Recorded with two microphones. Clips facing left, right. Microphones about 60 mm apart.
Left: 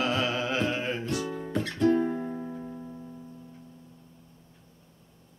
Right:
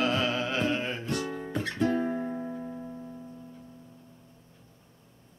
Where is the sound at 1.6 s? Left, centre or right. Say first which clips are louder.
Left 4 dB; centre.